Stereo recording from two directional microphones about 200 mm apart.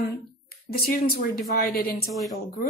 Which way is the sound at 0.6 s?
50° left (ahead or behind).